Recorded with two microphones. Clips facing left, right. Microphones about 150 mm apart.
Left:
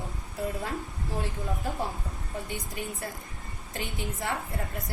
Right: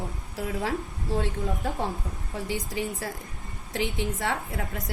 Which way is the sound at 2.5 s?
90° right.